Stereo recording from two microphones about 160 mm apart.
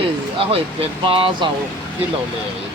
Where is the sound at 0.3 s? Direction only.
35° right (ahead or behind).